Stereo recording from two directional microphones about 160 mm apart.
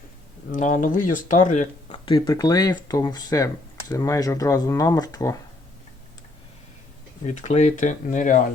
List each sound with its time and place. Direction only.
0.5 s speech: 55° left (ahead or behind)
1.9 s speech: 25° left (ahead or behind)
7.3 s speech: 45° left (ahead or behind)